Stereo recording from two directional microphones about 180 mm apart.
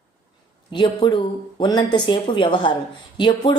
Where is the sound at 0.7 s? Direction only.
25° left (ahead or behind).